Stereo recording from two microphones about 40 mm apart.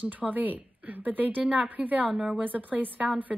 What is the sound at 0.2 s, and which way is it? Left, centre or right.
A woman's voice, right.